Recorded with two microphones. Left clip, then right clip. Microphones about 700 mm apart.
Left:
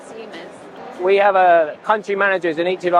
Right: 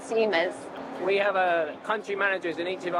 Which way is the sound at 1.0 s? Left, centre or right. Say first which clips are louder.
Left 11 dB; left.